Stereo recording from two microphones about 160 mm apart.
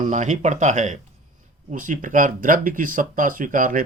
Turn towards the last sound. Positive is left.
turn(degrees=-55)  # may be behind; listen again after turning